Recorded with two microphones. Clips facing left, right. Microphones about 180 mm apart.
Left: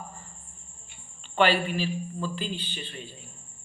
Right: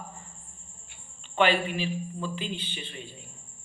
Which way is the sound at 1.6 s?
15° right (ahead or behind).